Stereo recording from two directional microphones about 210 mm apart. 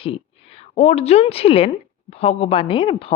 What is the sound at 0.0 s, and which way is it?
A woman's voice, 30° left (ahead or behind).